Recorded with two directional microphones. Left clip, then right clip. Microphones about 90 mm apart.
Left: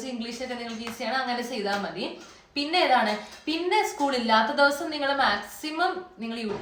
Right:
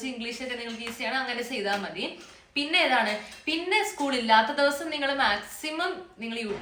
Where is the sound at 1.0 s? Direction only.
35° left (ahead or behind).